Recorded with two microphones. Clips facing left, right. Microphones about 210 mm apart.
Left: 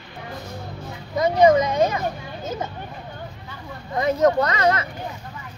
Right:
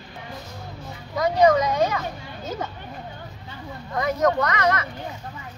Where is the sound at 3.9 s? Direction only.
25° left (ahead or behind).